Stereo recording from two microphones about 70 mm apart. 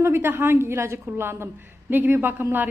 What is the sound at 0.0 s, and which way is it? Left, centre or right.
A woman's voice, right.